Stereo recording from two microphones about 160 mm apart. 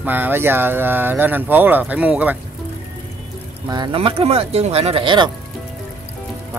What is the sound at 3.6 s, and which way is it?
Speech, 25° right (ahead or behind).